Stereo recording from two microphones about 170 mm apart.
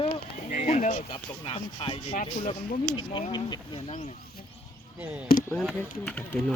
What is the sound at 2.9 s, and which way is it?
Speech, 30° left (ahead or behind).